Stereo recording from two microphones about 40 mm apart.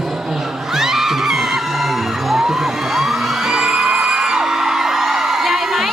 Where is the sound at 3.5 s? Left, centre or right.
Centre.